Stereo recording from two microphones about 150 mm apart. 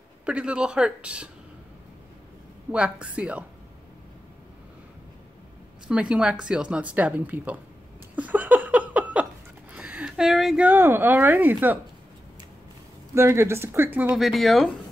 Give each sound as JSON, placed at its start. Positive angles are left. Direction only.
{"t": 0.2, "sound": "a woman's voice", "side_deg": -10}
{"t": 2.7, "sound": "a woman's voice", "side_deg": -5}
{"t": 5.9, "sound": "a woman's voice", "side_deg": -5}
{"t": 8.2, "sound": "laughter", "side_deg": -10}
{"t": 13.1, "sound": "a woman's voice", "side_deg": -15}